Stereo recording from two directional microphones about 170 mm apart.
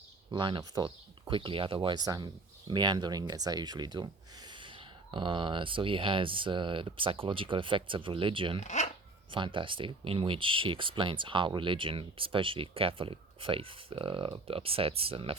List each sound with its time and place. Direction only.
0.3 s speech: 30° right (ahead or behind)
5.1 s speech: 30° right (ahead or behind)
8.6 s speech: 45° left (ahead or behind)
9.3 s speech: 30° right (ahead or behind)